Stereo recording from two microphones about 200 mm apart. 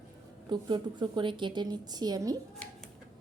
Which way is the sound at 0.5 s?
25° right (ahead or behind).